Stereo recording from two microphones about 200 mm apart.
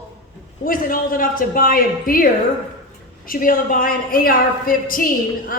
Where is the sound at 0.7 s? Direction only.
45° left (ahead or behind).